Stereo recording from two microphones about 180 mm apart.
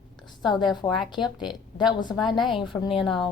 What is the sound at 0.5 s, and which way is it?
A woman's voice, centre (ahead or behind).